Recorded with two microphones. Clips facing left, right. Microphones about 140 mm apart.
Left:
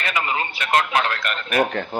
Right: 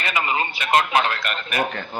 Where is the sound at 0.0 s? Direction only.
10° right (ahead or behind).